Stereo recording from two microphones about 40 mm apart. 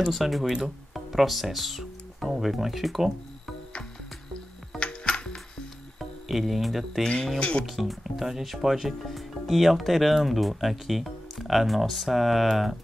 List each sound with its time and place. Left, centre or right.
0.0 s speech: centre
4.7 s music: left
6.2 s speech: centre
7.3 s speech: left
7.6 s speech: centre